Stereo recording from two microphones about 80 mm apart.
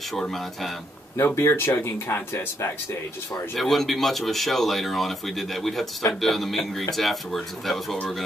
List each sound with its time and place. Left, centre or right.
0.1 s speech: centre
1.1 s speech: left
3.5 s speech: centre